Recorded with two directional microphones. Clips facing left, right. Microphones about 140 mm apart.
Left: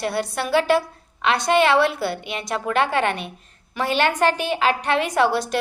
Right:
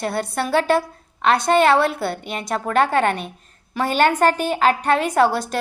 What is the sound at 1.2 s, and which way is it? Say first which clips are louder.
A woman's voice: right 2 dB; 40° right (ahead or behind).